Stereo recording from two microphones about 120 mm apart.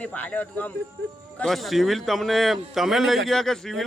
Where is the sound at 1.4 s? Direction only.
Centre (ahead or behind).